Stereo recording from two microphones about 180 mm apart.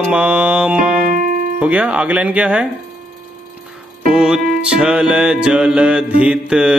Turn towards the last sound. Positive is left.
turn(degrees=-5)  # may be behind; listen again after turning